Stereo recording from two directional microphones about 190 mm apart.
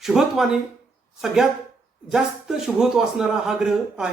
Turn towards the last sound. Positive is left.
turn(degrees=-5)  # may be behind; listen again after turning